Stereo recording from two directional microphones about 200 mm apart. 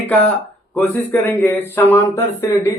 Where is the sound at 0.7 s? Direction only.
10° left (ahead or behind).